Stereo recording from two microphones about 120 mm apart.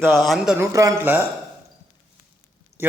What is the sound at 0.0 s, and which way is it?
Speech, 5° left (ahead or behind).